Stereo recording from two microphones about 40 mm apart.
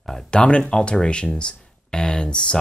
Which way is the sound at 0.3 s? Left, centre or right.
Left.